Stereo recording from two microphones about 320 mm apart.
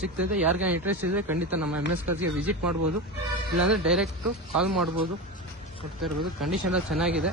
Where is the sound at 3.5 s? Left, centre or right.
Centre.